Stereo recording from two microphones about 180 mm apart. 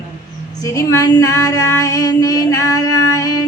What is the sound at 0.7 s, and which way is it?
Female singing, 20° left (ahead or behind).